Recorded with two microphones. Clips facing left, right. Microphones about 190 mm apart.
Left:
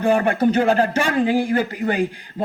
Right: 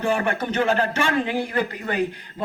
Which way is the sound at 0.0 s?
35° left (ahead or behind).